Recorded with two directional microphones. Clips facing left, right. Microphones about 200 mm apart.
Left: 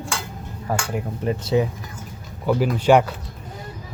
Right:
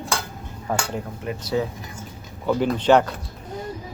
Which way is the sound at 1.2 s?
25° left (ahead or behind).